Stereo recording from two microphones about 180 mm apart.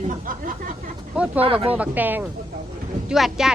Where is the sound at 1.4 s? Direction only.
30° right (ahead or behind).